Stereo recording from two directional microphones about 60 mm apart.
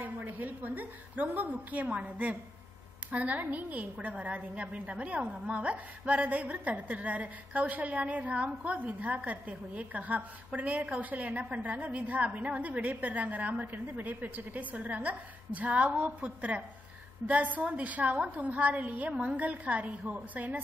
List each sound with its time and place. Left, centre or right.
0.0 s a woman's voice: right